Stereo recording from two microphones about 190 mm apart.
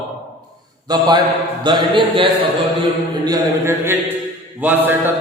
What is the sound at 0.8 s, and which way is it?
A man's voice, 20° right (ahead or behind).